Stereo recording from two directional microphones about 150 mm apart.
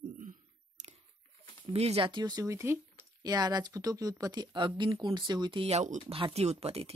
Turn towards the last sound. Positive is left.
turn(degrees=-40)  # may be behind; listen again after turning